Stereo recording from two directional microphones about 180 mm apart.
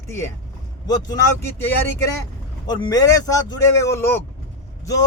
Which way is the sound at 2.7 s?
20° left (ahead or behind).